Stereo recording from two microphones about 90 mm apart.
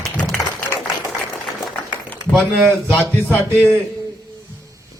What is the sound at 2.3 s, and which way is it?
Speech, centre (ahead or behind).